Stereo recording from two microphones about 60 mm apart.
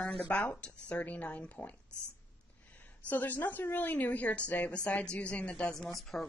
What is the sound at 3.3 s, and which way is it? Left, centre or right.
Speech, left.